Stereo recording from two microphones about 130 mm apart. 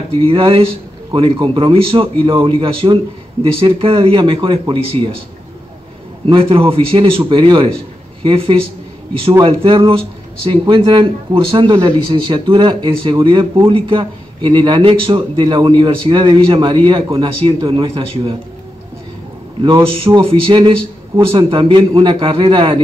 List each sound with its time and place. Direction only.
0.2 s a man's voice: 40° right (ahead or behind)
6.2 s a man's voice: 45° right (ahead or behind)
19.6 s speech: 40° right (ahead or behind)